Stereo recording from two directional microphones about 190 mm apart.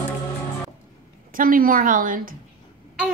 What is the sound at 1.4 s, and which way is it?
Speech, 45° right (ahead or behind).